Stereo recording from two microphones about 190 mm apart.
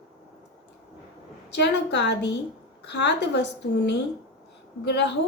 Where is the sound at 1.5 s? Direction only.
65° left (ahead or behind).